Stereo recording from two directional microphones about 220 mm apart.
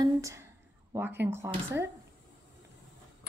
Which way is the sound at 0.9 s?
10° right (ahead or behind).